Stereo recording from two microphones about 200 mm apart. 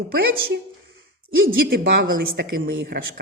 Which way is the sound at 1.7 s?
50° right (ahead or behind).